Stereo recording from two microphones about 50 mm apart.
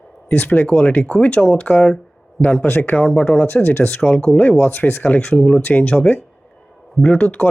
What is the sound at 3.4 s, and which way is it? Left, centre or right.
Speech, left.